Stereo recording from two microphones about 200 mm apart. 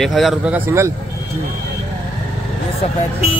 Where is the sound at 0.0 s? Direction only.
Centre (ahead or behind).